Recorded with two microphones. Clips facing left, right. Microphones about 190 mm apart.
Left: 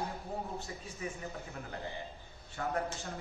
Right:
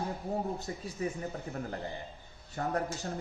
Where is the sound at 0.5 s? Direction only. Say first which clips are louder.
Right 5 dB; 40° right (ahead or behind).